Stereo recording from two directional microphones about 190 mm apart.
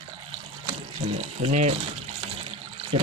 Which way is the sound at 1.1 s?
40° right (ahead or behind).